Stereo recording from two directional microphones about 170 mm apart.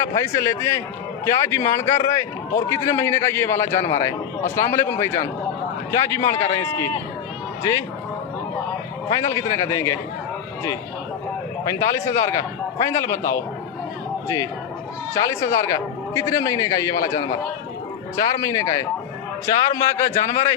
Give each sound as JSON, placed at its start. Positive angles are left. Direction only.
{"t": 0.0, "sound": "a man's voice", "side_deg": 15}
{"t": 9.0, "sound": "a man's voice", "side_deg": 20}
{"t": 11.6, "sound": "a man's voice", "side_deg": 20}
{"t": 15.1, "sound": "a man's voice", "side_deg": 15}